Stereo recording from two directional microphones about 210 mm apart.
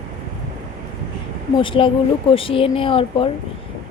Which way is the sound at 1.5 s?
25° left (ahead or behind).